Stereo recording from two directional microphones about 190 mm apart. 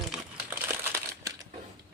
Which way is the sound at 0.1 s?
10° right (ahead or behind).